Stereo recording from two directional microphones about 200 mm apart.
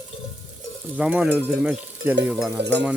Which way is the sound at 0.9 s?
5° right (ahead or behind).